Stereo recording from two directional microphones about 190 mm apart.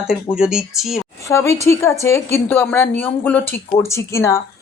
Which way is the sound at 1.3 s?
15° left (ahead or behind).